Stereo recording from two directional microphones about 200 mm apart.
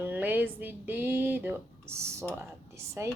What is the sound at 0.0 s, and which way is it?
Speech, 10° right (ahead or behind).